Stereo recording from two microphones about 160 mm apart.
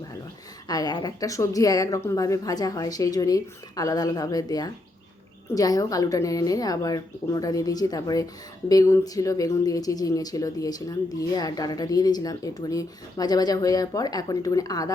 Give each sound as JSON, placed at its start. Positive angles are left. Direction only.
{"t": 0.7, "sound": "speech", "side_deg": 25}